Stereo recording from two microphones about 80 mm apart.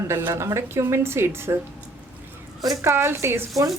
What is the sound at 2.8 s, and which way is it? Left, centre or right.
Speech, right.